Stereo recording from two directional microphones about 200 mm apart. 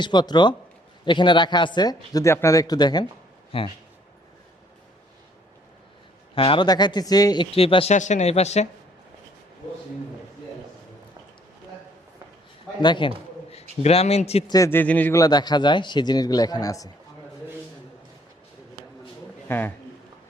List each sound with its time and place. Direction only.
0.0 s speech: 20° left (ahead or behind)
6.3 s speech: 25° left (ahead or behind)
12.8 s a man's voice: 25° left (ahead or behind)
14.5 s speech: 15° left (ahead or behind)
19.5 s speech: 10° left (ahead or behind)